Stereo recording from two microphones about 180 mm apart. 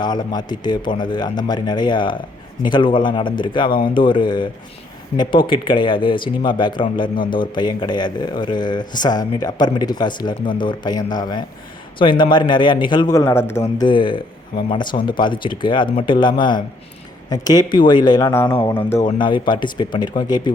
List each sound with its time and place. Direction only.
0.0 s speech: 25° left (ahead or behind)
13.8 s speech: 25° left (ahead or behind)
19.0 s speech: 25° left (ahead or behind)